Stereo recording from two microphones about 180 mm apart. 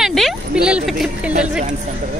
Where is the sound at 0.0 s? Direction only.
Centre (ahead or behind).